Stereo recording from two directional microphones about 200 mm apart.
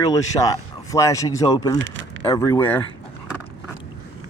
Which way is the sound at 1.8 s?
65° right (ahead or behind).